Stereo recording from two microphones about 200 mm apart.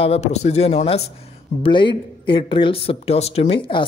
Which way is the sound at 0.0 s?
30° left (ahead or behind).